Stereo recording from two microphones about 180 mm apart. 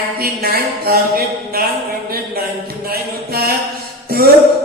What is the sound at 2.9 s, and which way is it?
Music, 60° right (ahead or behind).